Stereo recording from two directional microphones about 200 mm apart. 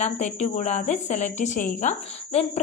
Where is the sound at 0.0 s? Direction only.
35° left (ahead or behind).